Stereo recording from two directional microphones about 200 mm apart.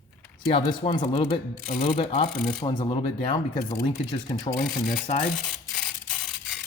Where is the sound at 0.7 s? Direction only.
25° left (ahead or behind).